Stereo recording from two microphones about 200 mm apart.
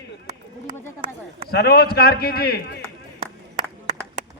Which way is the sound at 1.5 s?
50° left (ahead or behind).